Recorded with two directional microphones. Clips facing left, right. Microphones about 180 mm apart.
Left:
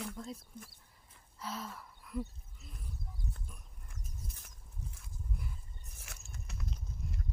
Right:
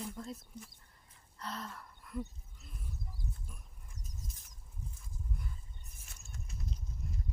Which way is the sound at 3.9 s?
65° left (ahead or behind).